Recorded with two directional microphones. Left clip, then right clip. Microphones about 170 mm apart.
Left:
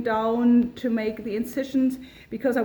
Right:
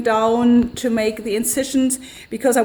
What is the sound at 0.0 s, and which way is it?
Speech, 40° right (ahead or behind).